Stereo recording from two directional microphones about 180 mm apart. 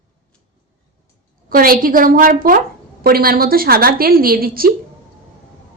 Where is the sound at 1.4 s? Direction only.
50° right (ahead or behind).